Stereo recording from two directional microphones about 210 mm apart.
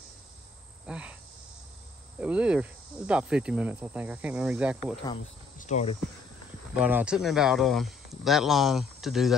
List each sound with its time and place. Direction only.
0.8 s speech: 5° right (ahead or behind)
2.1 s speech: 5° right (ahead or behind)
5.6 s speech: 35° left (ahead or behind)
6.7 s speech: 5° right (ahead or behind)